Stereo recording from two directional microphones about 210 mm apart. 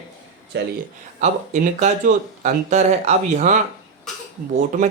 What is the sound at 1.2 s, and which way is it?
Speech, 35° right (ahead or behind).